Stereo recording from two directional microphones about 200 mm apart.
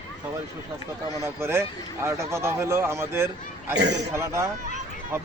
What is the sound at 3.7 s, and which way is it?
Speech, 60° right (ahead or behind).